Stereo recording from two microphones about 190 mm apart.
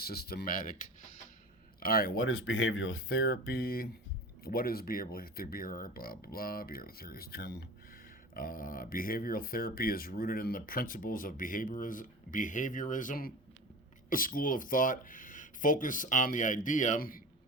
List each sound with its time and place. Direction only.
0.0 s speech: 55° left (ahead or behind)
1.8 s speech: 50° left (ahead or behind)
2.1 s speech: 90° left
3.1 s speech: 55° left (ahead or behind)